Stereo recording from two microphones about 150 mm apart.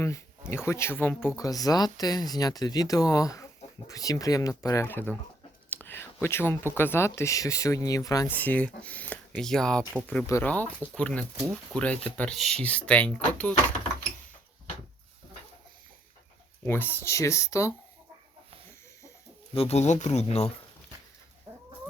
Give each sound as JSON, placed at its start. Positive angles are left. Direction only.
{"t": 0.0, "sound": "speech", "side_deg": 20}
{"t": 5.7, "sound": "a sound", "side_deg": 15}
{"t": 6.2, "sound": "speech", "side_deg": 15}
{"t": 8.3, "sound": "speech", "side_deg": 10}
{"t": 10.2, "sound": "speech", "side_deg": 20}
{"t": 10.5, "sound": "speech", "side_deg": 10}
{"t": 16.6, "sound": "speech", "side_deg": 15}
{"t": 19.5, "sound": "speech", "side_deg": 45}